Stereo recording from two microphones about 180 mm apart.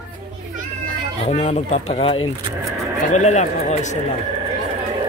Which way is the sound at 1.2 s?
40° left (ahead or behind).